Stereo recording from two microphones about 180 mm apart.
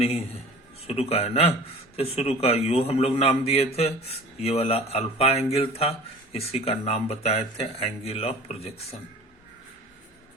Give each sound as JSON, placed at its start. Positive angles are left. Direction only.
{"t": 0.0, "sound": "speech", "side_deg": 35}